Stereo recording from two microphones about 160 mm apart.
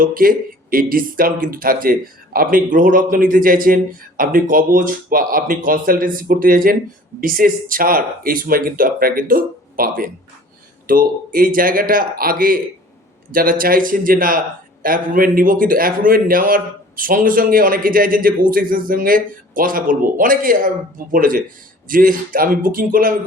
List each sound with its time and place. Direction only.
0.0 s a man's voice: 60° right (ahead or behind)